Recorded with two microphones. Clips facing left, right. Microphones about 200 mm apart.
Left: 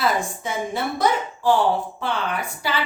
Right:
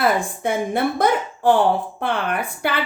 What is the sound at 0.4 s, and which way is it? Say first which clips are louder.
A woman's voice: right 9 dB; 55° right (ahead or behind).